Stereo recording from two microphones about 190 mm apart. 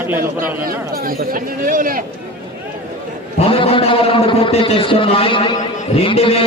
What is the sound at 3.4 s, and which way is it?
A man's voice, 30° left (ahead or behind).